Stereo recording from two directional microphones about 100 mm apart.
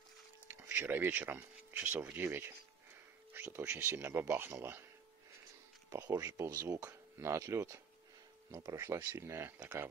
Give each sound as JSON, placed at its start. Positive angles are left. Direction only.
{"t": 0.5, "sound": "speech", "side_deg": -25}
{"t": 5.9, "sound": "speech", "side_deg": -35}